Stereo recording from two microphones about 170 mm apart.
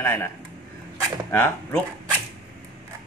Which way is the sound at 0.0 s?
15° left (ahead or behind).